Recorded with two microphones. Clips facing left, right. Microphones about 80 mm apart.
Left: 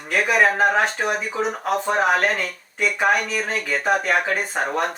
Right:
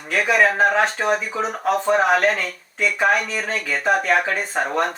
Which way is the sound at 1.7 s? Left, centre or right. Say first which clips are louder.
Right 3 dB; centre.